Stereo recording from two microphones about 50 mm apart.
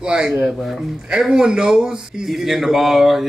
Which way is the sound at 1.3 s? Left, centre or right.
Centre.